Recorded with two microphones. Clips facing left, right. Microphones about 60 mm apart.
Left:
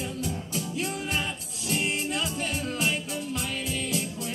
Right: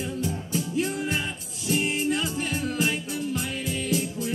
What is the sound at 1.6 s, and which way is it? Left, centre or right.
Music, left.